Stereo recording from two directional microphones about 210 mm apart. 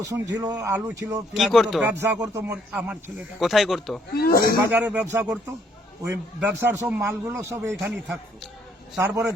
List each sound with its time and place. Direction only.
0.0 s a man's voice: 15° right (ahead or behind)
1.3 s speech: centre (ahead or behind)
2.0 s a man's voice: 15° right (ahead or behind)
4.1 s speech: 45° left (ahead or behind)
4.7 s a man's voice: 5° right (ahead or behind)
9.0 s a man's voice: 15° right (ahead or behind)